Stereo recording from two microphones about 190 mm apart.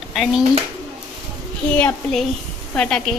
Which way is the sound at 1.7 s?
10° left (ahead or behind).